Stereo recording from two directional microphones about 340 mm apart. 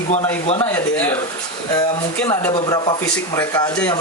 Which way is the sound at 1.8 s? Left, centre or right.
Centre.